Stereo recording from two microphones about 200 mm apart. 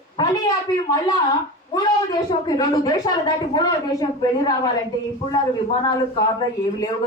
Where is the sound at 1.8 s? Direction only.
20° left (ahead or behind).